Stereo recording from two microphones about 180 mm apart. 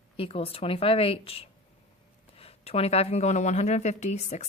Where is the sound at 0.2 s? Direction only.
35° left (ahead or behind).